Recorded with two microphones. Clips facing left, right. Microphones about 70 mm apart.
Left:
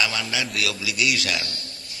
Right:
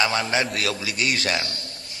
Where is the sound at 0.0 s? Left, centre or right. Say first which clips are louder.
Right 4 dB; right.